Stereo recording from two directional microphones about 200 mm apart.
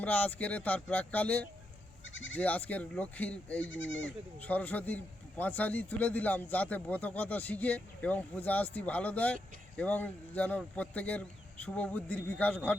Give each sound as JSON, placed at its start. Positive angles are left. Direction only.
{"t": 0.0, "sound": "a man's voice", "side_deg": 10}
{"t": 2.0, "sound": "speech", "side_deg": 70}
{"t": 2.4, "sound": "a man's voice", "side_deg": 5}
{"t": 3.7, "sound": "speech", "side_deg": 70}
{"t": 4.4, "sound": "a man's voice", "side_deg": 10}